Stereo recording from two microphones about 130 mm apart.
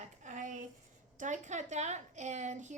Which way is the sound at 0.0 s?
65° right (ahead or behind).